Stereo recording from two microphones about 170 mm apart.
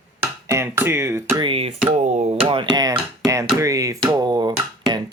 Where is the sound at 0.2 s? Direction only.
15° right (ahead or behind).